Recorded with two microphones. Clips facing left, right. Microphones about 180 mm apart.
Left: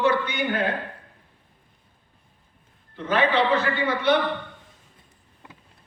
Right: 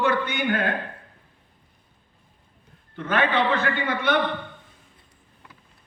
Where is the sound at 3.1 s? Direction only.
50° right (ahead or behind).